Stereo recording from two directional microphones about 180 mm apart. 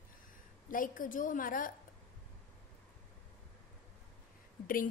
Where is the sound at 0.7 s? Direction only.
50° left (ahead or behind).